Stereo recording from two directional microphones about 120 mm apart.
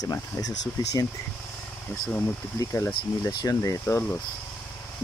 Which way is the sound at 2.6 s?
25° left (ahead or behind).